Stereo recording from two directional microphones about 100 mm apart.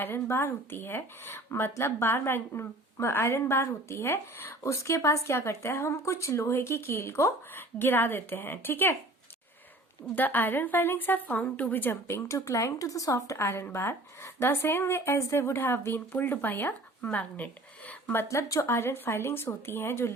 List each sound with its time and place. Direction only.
0.0 s speech: 25° left (ahead or behind)
10.2 s speech: 20° left (ahead or behind)